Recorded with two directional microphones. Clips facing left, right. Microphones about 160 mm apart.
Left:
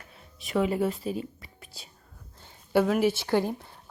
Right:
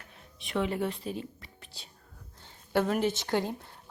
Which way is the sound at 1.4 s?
10° left (ahead or behind).